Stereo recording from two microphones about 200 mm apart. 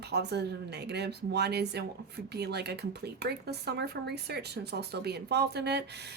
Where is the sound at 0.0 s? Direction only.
55° right (ahead or behind).